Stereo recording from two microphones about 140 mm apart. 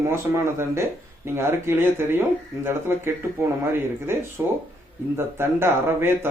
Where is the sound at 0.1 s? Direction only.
20° right (ahead or behind).